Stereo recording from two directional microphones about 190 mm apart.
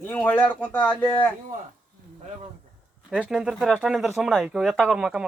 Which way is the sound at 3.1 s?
Centre (ahead or behind).